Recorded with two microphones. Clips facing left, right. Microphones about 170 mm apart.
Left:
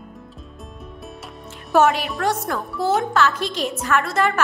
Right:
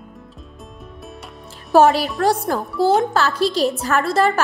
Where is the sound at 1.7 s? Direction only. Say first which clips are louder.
Right 4 dB; 35° right (ahead or behind).